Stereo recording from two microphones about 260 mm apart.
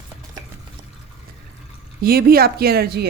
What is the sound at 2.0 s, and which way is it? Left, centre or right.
Speech, right.